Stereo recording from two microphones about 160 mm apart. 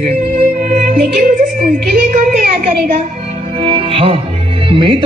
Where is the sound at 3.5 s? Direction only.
35° right (ahead or behind).